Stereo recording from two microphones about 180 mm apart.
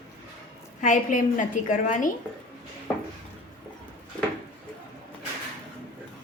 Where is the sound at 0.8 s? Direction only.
45° left (ahead or behind).